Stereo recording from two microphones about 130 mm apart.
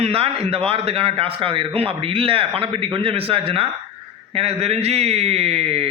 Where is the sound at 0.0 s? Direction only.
50° right (ahead or behind).